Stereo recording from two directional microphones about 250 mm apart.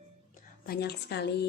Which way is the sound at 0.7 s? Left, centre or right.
Left.